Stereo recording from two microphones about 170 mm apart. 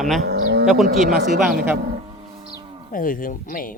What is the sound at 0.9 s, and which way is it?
Speech, 55° right (ahead or behind).